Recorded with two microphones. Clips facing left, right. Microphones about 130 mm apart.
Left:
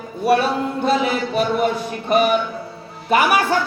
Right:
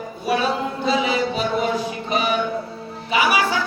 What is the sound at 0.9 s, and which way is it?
A woman's voice, 55° left (ahead or behind).